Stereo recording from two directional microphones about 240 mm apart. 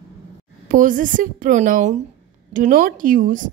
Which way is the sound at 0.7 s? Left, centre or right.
Right.